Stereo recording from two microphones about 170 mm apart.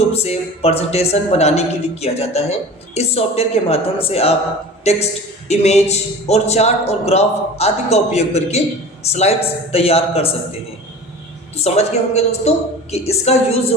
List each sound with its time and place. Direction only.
0.1 s a man's voice: 35° left (ahead or behind)
11.5 s speech: 40° left (ahead or behind)